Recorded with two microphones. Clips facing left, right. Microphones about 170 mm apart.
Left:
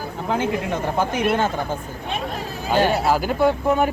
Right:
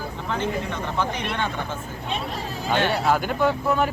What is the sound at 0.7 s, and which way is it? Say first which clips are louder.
Speech: left 4 dB; 45° left (ahead or behind).